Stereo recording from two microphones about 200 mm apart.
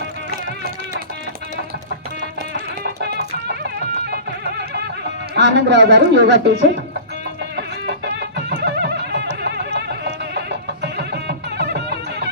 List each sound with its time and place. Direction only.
3.0 s music: 55° right (ahead or behind)
5.3 s speech: 60° right (ahead or behind)
7.5 s music: 55° right (ahead or behind)